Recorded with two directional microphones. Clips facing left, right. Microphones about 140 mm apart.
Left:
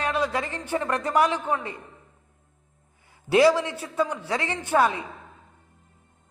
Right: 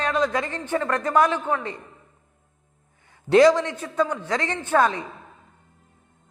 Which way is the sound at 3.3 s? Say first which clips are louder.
Right 3 dB; 10° left (ahead or behind).